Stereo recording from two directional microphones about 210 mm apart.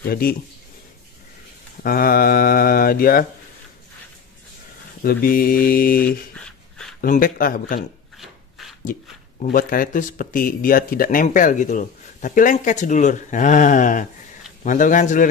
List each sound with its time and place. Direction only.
0.0 s speech: 45° left (ahead or behind)
1.8 s speech: 45° left (ahead or behind)
5.0 s speech: 45° left (ahead or behind)
6.3 s a sound: 5° left (ahead or behind)
7.0 s speech: 40° left (ahead or behind)
8.2 s rub: centre (ahead or behind)
9.4 s speech: 40° left (ahead or behind)